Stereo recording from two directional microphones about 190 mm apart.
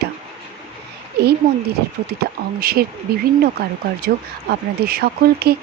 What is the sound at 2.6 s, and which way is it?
A woman's voice, 50° right (ahead or behind).